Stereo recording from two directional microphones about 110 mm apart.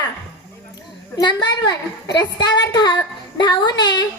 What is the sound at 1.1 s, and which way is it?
A woman's voice, 45° left (ahead or behind).